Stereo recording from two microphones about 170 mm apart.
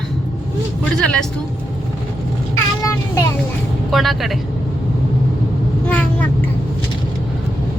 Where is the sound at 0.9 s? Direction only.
5° left (ahead or behind).